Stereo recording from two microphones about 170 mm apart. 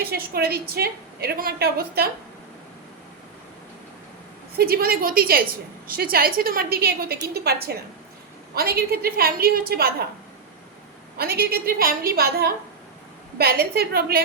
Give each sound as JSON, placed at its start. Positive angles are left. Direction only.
{"t": 0.0, "sound": "a woman's voice", "side_deg": -65}
{"t": 4.5, "sound": "a woman's voice", "side_deg": -65}
{"t": 11.2, "sound": "a woman's voice", "side_deg": -65}